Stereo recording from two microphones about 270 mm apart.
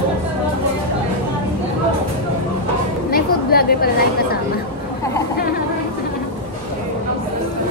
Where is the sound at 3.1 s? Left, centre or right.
Left.